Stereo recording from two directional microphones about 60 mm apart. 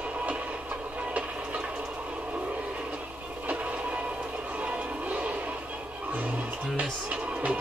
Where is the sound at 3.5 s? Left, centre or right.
Right.